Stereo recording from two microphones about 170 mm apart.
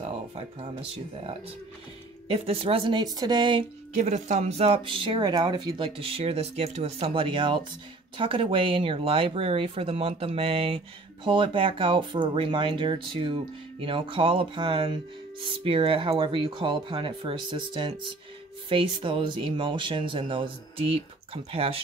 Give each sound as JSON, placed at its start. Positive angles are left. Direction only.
{"t": 0.3, "sound": "speech", "side_deg": -35}
{"t": 3.9, "sound": "speech", "side_deg": -45}